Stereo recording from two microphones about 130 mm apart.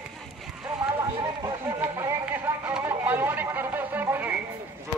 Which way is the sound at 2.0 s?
15° right (ahead or behind).